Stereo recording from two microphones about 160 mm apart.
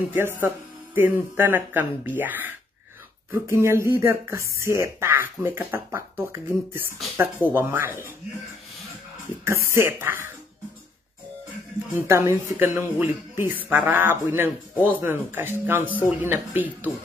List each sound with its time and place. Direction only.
0.1 s speech: 15° right (ahead or behind)
9.4 s speech: 15° right (ahead or behind)
11.9 s speech: 15° right (ahead or behind)